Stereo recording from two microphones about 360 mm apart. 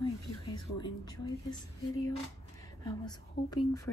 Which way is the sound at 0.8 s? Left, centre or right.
Centre.